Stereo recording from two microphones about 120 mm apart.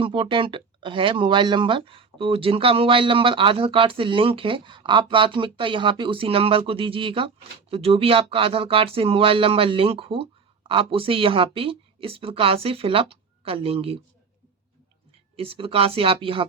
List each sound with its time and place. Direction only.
0.0 s speech: 45° right (ahead or behind)
15.4 s speech: 50° right (ahead or behind)